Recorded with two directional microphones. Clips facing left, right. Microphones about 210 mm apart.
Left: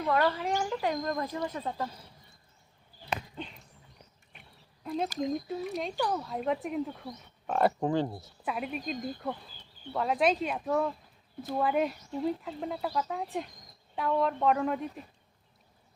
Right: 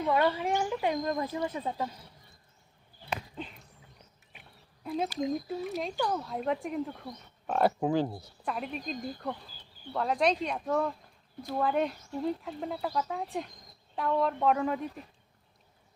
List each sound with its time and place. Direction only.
0.0 s speech: 15° right (ahead or behind)
4.3 s a sound: 5° right (ahead or behind)
5.2 s speech: centre (ahead or behind)